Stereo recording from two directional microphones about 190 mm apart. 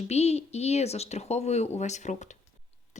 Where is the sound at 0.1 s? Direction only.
35° left (ahead or behind).